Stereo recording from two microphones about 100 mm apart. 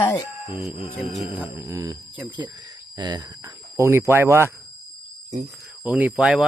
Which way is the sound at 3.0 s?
45° right (ahead or behind).